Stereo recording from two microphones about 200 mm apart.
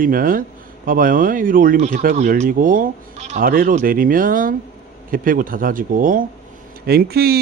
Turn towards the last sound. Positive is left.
turn(degrees=-50)  # may be behind; listen again after turning